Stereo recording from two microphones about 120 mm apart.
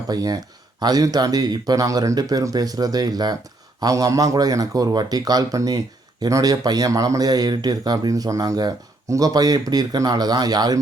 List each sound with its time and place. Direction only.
0.1 s speech: 30° right (ahead or behind)